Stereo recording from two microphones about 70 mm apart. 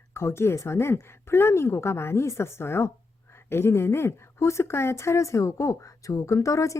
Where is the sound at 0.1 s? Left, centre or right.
Left.